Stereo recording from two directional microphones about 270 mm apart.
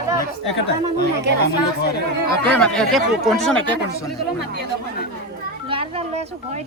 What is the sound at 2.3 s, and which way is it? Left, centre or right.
Speech, centre.